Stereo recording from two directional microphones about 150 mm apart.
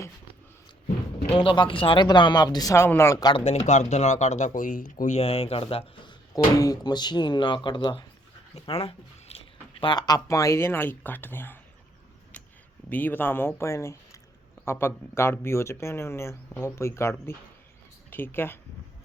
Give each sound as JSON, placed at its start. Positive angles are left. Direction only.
{"t": 1.3, "sound": "speech", "side_deg": 35}
{"t": 3.3, "sound": "speech", "side_deg": 40}
{"t": 8.5, "sound": "speech", "side_deg": 40}
{"t": 9.8, "sound": "speech", "side_deg": 30}
{"t": 12.9, "sound": "speech", "side_deg": 15}